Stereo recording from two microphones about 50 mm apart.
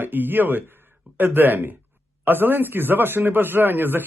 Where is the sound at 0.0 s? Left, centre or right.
Right.